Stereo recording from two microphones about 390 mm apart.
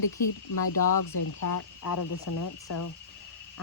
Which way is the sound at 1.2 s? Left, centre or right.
Left.